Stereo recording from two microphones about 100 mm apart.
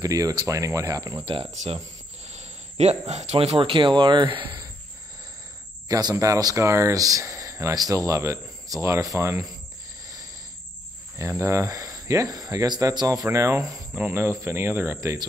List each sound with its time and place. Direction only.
0.0 s speech: 35° right (ahead or behind)
1.2 s speech: 65° right (ahead or behind)
2.2 s speech: 90° right; by 4.6 s 55° right (ahead or behind)
5.9 s speech: 40° right (ahead or behind)
11.1 s speech: 30° right (ahead or behind)
13.9 s speech: 20° right (ahead or behind)